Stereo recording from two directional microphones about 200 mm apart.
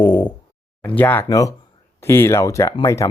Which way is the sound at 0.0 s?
25° left (ahead or behind).